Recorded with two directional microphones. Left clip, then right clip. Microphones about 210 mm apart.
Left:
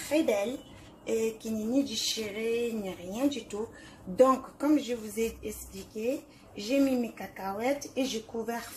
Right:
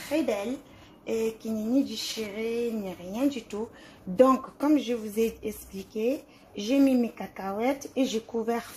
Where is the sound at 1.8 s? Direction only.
30° right (ahead or behind).